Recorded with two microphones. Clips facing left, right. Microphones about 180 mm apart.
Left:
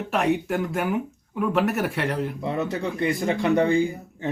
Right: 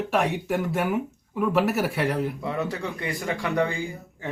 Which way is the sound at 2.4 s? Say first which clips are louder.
Left 2 dB; 20° left (ahead or behind).